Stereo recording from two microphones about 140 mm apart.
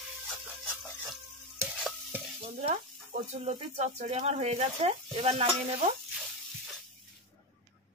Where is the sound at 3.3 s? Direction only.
55° right (ahead or behind).